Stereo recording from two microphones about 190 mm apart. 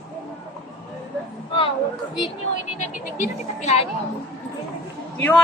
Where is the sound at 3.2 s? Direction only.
35° left (ahead or behind).